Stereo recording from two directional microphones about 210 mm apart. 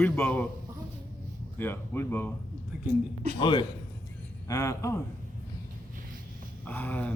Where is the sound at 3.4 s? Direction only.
25° left (ahead or behind).